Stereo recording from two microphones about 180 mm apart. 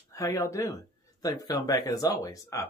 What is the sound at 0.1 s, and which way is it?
Speech, 20° left (ahead or behind).